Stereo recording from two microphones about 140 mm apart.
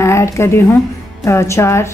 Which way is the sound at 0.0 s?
20° left (ahead or behind).